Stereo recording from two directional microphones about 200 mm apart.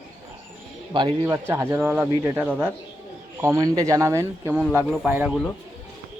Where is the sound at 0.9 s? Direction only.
20° right (ahead or behind); by 5.4 s 5° right (ahead or behind).